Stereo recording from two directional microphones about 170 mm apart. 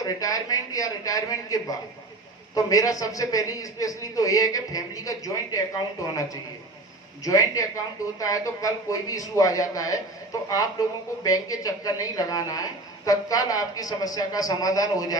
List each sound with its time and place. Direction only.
0.0 s a woman's voice: 20° left (ahead or behind)
11.2 s a woman's voice: 20° left (ahead or behind)